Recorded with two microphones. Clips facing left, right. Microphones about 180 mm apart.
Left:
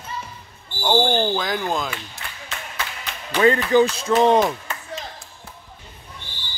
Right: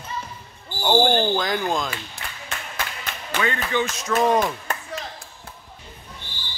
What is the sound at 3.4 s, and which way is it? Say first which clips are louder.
Speech: left 10 dB; 35° left (ahead or behind).